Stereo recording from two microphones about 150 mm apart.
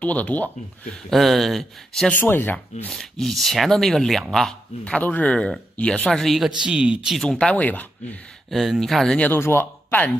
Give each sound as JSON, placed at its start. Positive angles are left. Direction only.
{"t": 0.0, "sound": "speech", "side_deg": 10}
{"t": 2.9, "sound": "speech", "side_deg": 0}
{"t": 8.5, "sound": "speech", "side_deg": 0}